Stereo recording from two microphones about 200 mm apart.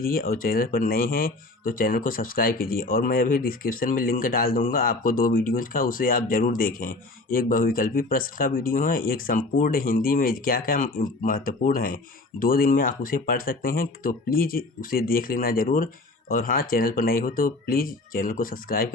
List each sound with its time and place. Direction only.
0.0 s speech: 45° left (ahead or behind)